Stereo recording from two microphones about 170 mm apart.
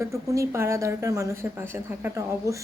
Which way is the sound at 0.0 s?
15° right (ahead or behind).